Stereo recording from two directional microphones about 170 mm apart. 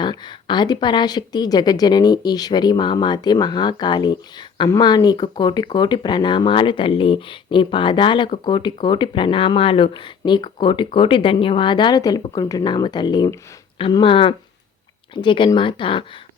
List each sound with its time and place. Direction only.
0.0 s speech: 25° left (ahead or behind)